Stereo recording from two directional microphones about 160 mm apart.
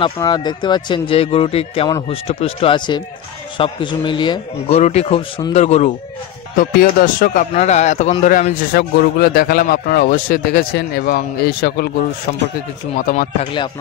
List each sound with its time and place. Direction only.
0.0 s speech: 25° left (ahead or behind)
4.7 s speech: 40° left (ahead or behind)
6.5 s speech: 65° left (ahead or behind)
8.9 s speech: 75° left (ahead or behind)
12.9 s speech: 55° left (ahead or behind)
13.4 s speech: 30° left (ahead or behind)